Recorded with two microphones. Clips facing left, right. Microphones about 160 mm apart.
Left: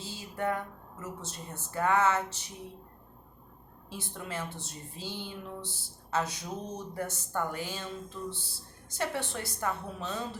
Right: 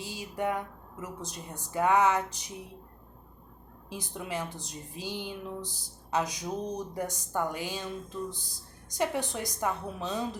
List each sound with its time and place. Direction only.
0.0 s a woman's voice: 15° right (ahead or behind)
3.8 s speech: 15° right (ahead or behind)